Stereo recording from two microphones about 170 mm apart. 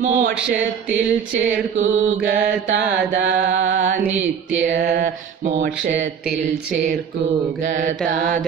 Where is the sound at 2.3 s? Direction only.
70° right (ahead or behind).